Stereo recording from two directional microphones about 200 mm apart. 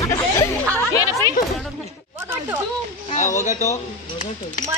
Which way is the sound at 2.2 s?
10° right (ahead or behind).